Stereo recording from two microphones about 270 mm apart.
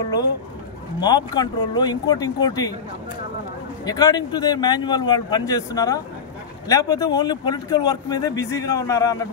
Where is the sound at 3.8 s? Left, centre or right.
Centre.